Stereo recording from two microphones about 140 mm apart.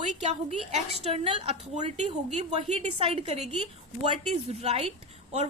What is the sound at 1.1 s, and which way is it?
A woman's voice, 45° right (ahead or behind).